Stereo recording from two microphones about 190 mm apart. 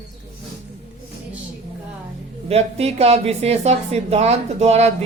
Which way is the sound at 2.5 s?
35° right (ahead or behind).